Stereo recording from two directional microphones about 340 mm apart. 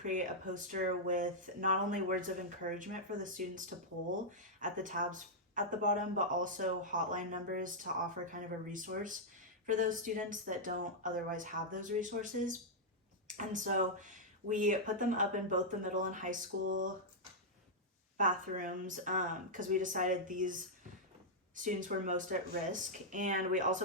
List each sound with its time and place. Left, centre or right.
0.0 s speech: right
18.2 s speech: right